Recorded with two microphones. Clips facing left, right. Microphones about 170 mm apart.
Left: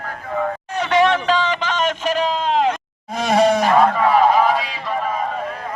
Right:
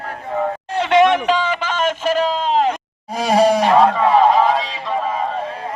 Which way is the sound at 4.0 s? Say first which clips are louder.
Right 1 dB; 25° right (ahead or behind).